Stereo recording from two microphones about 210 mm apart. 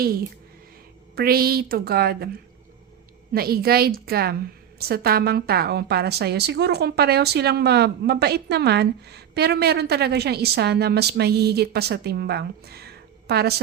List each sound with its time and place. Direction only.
1.1 s a woman's voice: 45° right (ahead or behind)
3.3 s a woman's voice: 45° right (ahead or behind)